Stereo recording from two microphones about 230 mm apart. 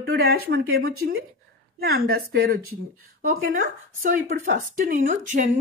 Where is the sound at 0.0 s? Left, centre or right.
Right.